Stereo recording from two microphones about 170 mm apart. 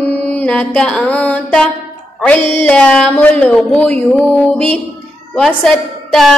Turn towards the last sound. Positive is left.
turn(degrees=5)  # may be behind; listen again after turning